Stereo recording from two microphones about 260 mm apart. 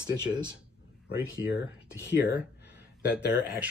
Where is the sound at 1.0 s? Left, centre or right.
Left.